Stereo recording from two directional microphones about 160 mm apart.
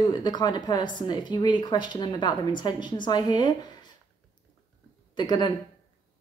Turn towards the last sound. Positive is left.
turn(degrees=25)  # may be behind; listen again after turning